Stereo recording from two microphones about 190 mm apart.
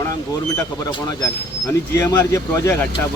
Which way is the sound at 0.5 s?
20° left (ahead or behind).